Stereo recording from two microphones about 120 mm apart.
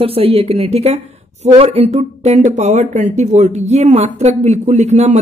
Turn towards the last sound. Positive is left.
turn(degrees=-70)  # may be behind; listen again after turning